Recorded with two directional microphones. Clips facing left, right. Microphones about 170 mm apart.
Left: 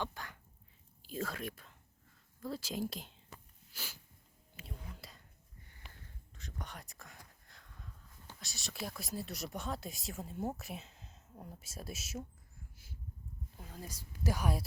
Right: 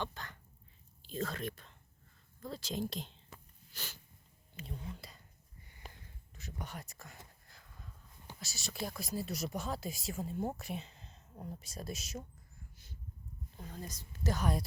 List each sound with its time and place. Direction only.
0.0 s a sound: 10° left (ahead or behind)
1.0 s speech: 10° left (ahead or behind)
3.7 s sneeze: 10° left (ahead or behind)
4.6 s speech: 5° left (ahead or behind)
4.9 s a sound: centre (ahead or behind)
5.8 s sniff: 40° right (ahead or behind)
6.3 s speech: 5° right (ahead or behind)
12.7 s a sound: 5° left (ahead or behind)
13.6 s speech: 5° left (ahead or behind)